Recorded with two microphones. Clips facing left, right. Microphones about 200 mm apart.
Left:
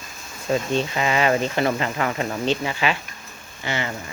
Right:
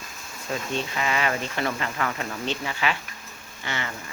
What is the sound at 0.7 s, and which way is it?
Speech, 25° left (ahead or behind).